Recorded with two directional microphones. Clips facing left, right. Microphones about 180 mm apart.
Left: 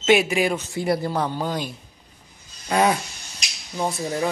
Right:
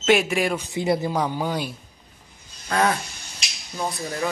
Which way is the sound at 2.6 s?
15° left (ahead or behind).